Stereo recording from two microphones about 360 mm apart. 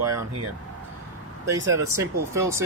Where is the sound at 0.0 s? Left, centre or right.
Centre.